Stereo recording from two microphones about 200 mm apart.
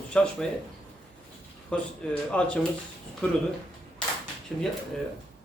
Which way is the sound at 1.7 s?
5° left (ahead or behind).